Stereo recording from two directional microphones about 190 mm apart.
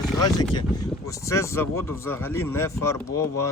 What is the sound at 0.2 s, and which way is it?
Speech, 20° left (ahead or behind).